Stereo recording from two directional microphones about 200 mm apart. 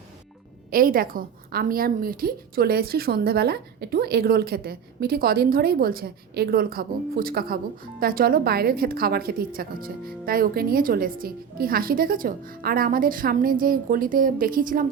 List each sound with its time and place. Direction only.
0.7 s a woman's voice: 45° right (ahead or behind)